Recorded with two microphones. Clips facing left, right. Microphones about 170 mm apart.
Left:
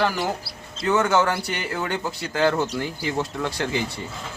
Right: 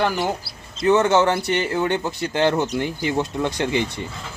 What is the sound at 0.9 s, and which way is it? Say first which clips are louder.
Speech: right 4 dB; 20° right (ahead or behind).